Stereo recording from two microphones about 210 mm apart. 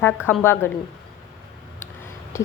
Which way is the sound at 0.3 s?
10° left (ahead or behind).